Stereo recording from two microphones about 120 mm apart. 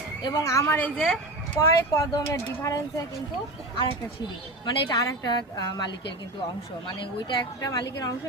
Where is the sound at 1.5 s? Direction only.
30° left (ahead or behind).